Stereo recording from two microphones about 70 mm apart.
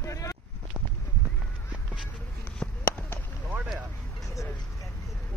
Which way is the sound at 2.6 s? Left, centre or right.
Centre.